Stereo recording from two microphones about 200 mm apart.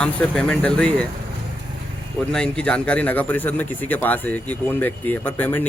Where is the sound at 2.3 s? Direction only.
5° left (ahead or behind).